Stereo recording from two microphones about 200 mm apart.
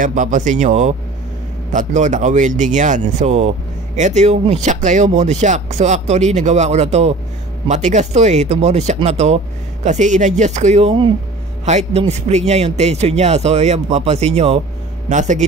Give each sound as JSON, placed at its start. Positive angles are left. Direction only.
{"t": 0.0, "sound": "a man's voice", "side_deg": -40}